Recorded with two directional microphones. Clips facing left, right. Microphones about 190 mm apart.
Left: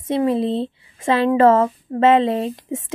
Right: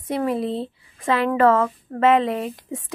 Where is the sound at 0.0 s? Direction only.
25° left (ahead or behind).